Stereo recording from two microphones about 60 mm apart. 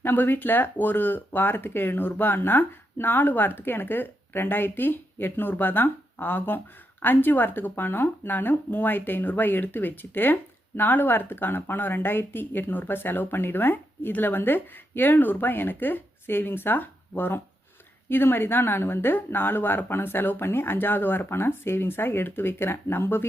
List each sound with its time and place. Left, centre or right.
0.0 s speech: left